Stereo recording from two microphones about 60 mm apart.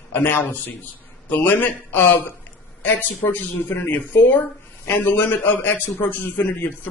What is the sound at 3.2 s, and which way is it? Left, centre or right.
A man's voice, left.